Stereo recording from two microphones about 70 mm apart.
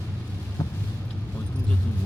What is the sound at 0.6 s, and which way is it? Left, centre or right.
Vehicle, left.